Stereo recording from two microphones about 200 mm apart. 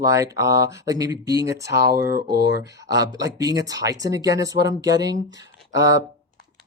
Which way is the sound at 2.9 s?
20° right (ahead or behind).